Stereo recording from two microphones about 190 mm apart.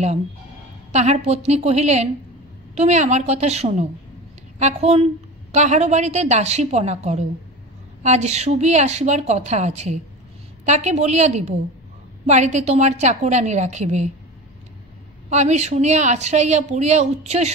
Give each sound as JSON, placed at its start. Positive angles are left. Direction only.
{"t": 0.9, "sound": "speech", "side_deg": -35}
{"t": 15.2, "sound": "speech", "side_deg": -35}